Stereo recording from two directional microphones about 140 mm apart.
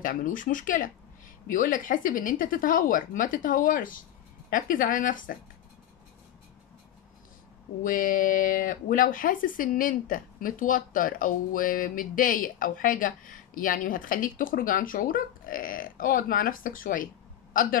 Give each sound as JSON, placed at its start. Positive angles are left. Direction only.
{"t": 0.0, "sound": "speech", "side_deg": 75}
{"t": 7.8, "sound": "speech", "side_deg": 75}